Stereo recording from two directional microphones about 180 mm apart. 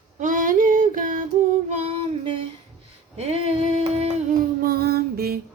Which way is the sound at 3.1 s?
35° right (ahead or behind).